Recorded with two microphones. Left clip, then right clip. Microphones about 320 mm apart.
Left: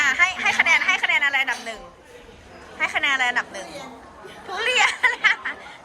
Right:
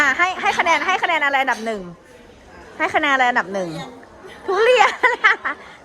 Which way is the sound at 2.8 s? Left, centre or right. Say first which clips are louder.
Right 4 dB; right.